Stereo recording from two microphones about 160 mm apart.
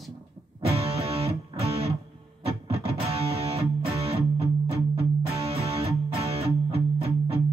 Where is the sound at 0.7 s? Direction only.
40° right (ahead or behind).